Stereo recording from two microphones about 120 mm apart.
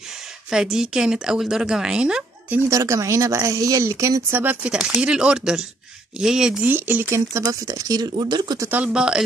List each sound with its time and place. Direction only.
0.5 s a woman's voice: 5° right (ahead or behind)
2.7 s a woman's voice: 25° right (ahead or behind); by 6.7 s 5° right (ahead or behind)
6.7 s speech: 15° right (ahead or behind); by 8.6 s 35° right (ahead or behind)
8.6 s speech: 10° right (ahead or behind)